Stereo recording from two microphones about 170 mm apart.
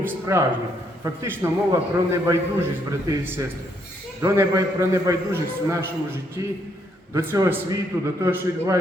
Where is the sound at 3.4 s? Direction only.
20° right (ahead or behind).